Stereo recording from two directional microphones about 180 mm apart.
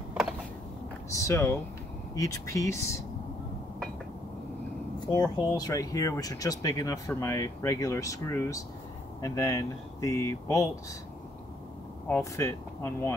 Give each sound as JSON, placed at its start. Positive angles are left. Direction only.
{"t": 1.1, "sound": "speech", "side_deg": 15}
{"t": 5.0, "sound": "speech", "side_deg": 20}
{"t": 12.1, "sound": "speech", "side_deg": 15}